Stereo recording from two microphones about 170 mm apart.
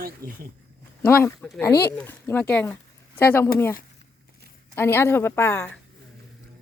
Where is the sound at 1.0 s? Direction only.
15° left (ahead or behind).